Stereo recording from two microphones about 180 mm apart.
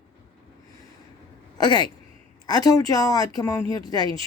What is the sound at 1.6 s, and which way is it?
Speech, 25° left (ahead or behind).